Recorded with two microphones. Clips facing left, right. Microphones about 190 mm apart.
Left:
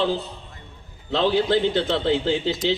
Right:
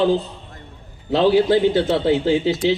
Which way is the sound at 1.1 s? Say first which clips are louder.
Right 5 dB; 10° right (ahead or behind).